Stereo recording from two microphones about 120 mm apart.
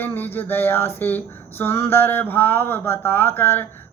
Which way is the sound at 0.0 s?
15° left (ahead or behind).